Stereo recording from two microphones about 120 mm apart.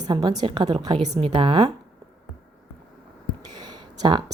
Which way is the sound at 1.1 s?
50° right (ahead or behind).